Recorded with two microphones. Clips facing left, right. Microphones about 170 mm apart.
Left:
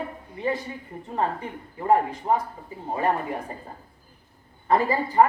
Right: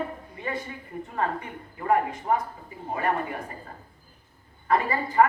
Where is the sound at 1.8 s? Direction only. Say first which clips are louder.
Left 3 dB; 30° left (ahead or behind).